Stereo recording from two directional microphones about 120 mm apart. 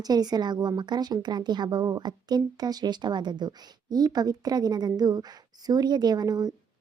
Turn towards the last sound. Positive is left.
turn(degrees=-35)  # may be behind; listen again after turning